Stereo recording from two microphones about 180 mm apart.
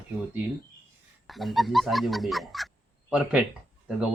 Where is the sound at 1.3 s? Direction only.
Centre (ahead or behind).